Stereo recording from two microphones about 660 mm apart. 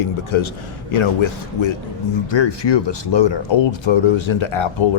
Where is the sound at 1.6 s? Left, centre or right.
Left.